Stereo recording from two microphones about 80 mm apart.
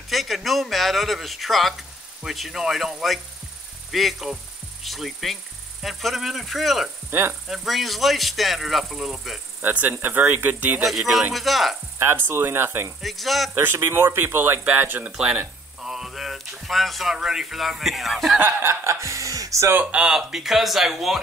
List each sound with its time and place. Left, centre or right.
0.1 s speech: centre
7.1 s speech: right
7.4 s speech: centre
9.6 s speech: right
10.8 s speech: centre
12.0 s speech: right
13.0 s speech: centre
13.8 s speech: right
15.1 s speech: centre
18.4 s speech: right
19.7 s speech: centre